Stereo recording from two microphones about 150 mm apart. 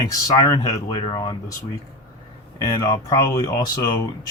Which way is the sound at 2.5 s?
20° left (ahead or behind).